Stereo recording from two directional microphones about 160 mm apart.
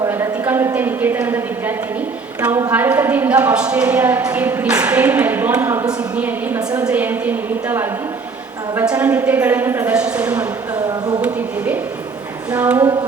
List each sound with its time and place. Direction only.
0.0 s a woman's voice: 15° right (ahead or behind)
8.9 s a woman's voice: 10° right (ahead or behind)
10.8 s speech: 25° right (ahead or behind)
11.2 s a woman's voice: 10° right (ahead or behind)